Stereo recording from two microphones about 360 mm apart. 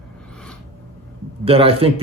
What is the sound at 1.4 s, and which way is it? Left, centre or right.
Speech, centre.